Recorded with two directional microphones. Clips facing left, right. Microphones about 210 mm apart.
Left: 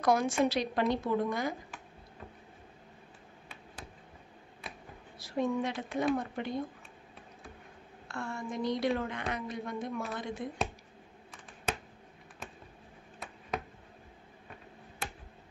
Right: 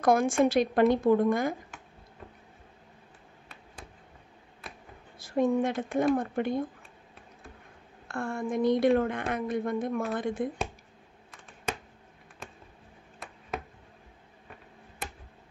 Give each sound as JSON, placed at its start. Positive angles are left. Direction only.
{"t": 0.0, "sound": "a woman's voice", "side_deg": -50}
{"t": 5.2, "sound": "a woman's voice", "side_deg": -50}
{"t": 8.1, "sound": "a woman's voice", "side_deg": -50}
{"t": 13.2, "sound": "a sound", "side_deg": 0}